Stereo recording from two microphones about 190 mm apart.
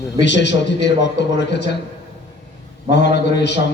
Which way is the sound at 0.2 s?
65° left (ahead or behind).